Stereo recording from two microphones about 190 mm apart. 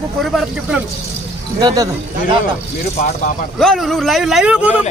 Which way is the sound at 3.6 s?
Centre (ahead or behind).